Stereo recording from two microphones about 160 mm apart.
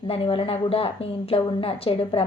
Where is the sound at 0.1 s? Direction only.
35° left (ahead or behind).